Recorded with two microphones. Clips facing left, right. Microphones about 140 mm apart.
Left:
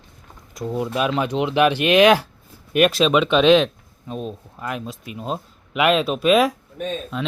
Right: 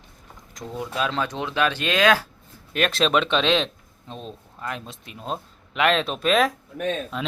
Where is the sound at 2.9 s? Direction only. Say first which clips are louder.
Left 4 dB; 5° left (ahead or behind).